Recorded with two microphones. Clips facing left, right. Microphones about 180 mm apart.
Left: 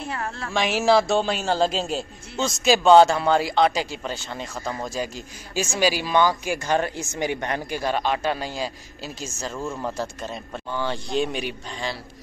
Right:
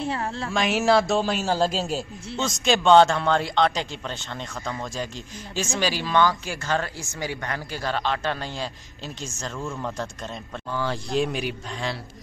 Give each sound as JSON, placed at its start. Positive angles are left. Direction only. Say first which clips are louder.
{"t": 0.0, "sound": "a woman's voice", "louder": "right 3 dB", "side_deg": -25}
{"t": 0.5, "sound": "a man's voice", "louder": "left 1 dB", "side_deg": 0}
{"t": 9.9, "sound": "a man's voice", "louder": "left 2 dB", "side_deg": 5}